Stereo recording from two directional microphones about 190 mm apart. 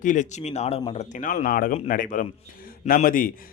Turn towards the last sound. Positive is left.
turn(degrees=45)  # may be behind; listen again after turning